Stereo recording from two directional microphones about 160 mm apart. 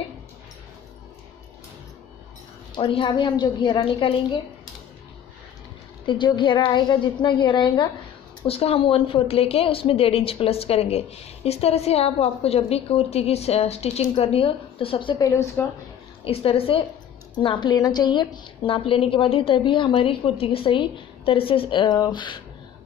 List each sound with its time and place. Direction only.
2.7 s a woman's voice: 30° left (ahead or behind)
6.0 s a woman's voice: 30° left (ahead or behind)
8.4 s a woman's voice: 40° left (ahead or behind); by 15.6 s 20° left (ahead or behind)
16.3 s a woman's voice: 35° left (ahead or behind)